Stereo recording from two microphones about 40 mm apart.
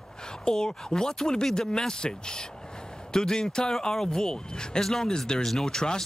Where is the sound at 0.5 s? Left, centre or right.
Centre.